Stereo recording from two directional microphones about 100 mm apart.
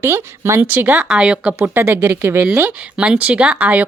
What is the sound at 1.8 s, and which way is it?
Speech, 30° right (ahead or behind).